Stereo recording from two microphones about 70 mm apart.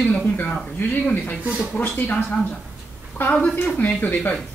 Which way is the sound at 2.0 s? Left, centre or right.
Left.